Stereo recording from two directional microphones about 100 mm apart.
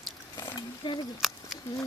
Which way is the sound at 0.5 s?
50° left (ahead or behind).